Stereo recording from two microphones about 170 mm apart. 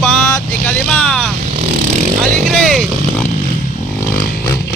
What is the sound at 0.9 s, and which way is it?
Speech, 5° left (ahead or behind).